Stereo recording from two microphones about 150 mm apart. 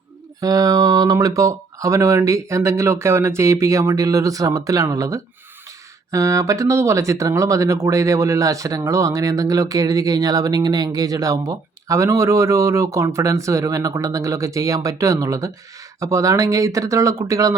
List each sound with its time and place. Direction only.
0.3 s speech: 25° right (ahead or behind)